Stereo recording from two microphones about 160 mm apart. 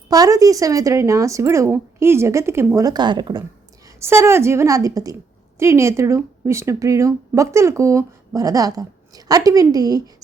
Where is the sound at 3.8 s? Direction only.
15° right (ahead or behind).